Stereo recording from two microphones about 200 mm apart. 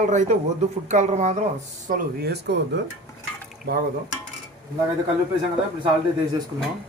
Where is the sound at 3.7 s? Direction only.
50° right (ahead or behind).